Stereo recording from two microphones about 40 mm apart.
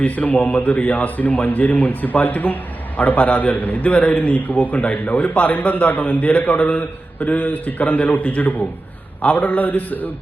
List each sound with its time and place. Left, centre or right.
0.0 s a man's voice: left
7.2 s a man's voice: left